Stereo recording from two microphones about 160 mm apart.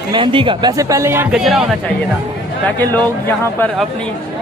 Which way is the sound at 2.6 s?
10° left (ahead or behind).